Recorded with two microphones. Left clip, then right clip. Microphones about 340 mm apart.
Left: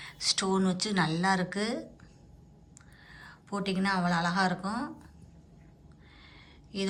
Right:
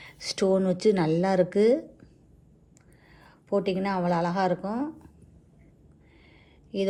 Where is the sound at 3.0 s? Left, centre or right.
Centre.